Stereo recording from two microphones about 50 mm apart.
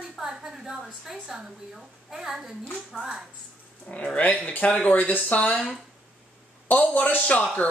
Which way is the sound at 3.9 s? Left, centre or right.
Left.